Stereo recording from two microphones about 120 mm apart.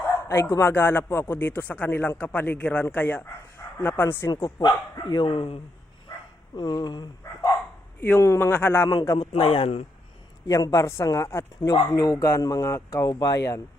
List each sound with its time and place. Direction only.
0.0 s speech: 20° left (ahead or behind)
4.3 s speech: 30° left (ahead or behind)
5.0 s speech: 40° left (ahead or behind)
5.3 s speech: 50° left (ahead or behind)
6.6 s speech: 35° left (ahead or behind)
8.0 s speech: 20° left (ahead or behind)
8.9 s speech: 35° left (ahead or behind)
9.4 s speech: 50° left (ahead or behind)
10.4 s speech: 25° left (ahead or behind)